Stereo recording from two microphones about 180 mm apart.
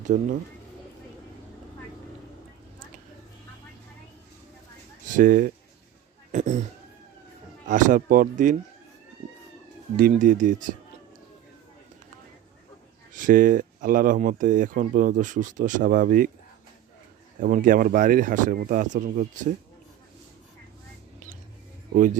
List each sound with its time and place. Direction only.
0.0 s speech: 45° right (ahead or behind)
5.0 s speech: 50° right (ahead or behind)
7.7 s speech: 45° right (ahead or behind)
10.0 s speech: 45° right (ahead or behind)
13.1 s speech: 50° right (ahead or behind)
17.4 s speech: 50° right (ahead or behind)
21.9 s speech: 45° right (ahead or behind)